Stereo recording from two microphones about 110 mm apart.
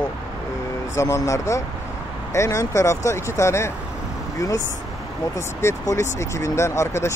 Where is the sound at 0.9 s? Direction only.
25° left (ahead or behind).